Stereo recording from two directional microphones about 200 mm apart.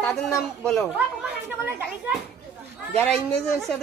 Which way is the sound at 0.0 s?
5° left (ahead or behind).